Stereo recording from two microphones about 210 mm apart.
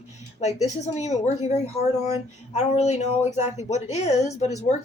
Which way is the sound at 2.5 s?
30° left (ahead or behind).